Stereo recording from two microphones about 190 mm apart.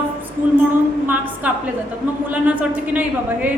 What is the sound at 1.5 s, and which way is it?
A woman's voice, 5° right (ahead or behind).